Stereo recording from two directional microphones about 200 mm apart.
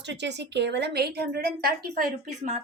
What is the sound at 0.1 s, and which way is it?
A woman's voice, 60° right (ahead or behind).